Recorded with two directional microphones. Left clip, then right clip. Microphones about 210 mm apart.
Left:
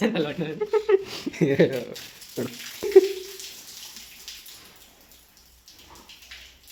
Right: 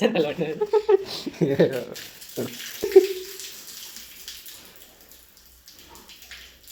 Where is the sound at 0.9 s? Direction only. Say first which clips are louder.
Right 1 dB; 20° left (ahead or behind).